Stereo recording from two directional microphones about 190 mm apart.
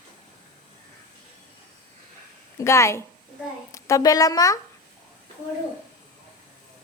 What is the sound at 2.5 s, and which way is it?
Speech, 15° left (ahead or behind).